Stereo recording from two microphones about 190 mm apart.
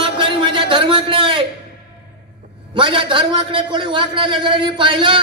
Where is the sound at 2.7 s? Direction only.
25° right (ahead or behind).